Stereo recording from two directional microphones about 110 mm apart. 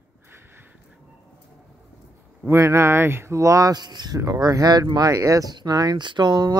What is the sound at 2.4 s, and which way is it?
A woman's voice, 25° right (ahead or behind).